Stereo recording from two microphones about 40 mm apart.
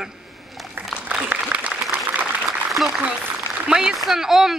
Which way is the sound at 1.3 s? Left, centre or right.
Right.